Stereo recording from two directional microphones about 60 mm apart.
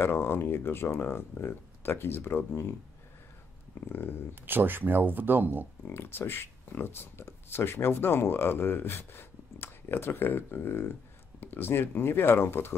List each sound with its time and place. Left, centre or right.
0.0 s speech: left
4.5 s speech: right
5.9 s speech: left